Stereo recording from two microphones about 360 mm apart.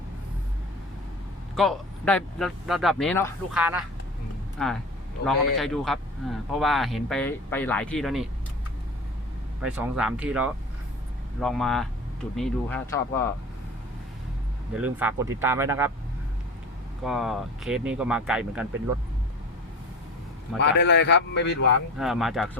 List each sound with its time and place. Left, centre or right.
1.5 s speech: centre
9.6 s speech: centre
14.7 s speech: centre
17.0 s speech: centre
20.6 s a man's voice: left
21.9 s speech: centre